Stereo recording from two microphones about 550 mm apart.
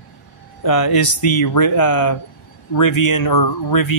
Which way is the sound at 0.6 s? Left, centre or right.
Left.